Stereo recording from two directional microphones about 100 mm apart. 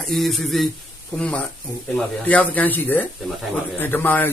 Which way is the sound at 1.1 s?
10° left (ahead or behind).